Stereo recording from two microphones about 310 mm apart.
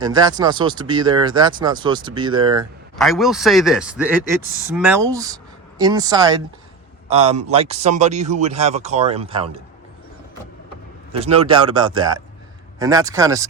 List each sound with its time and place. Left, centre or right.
0.0 s speech: centre
3.0 s speech: centre
11.1 s speech: centre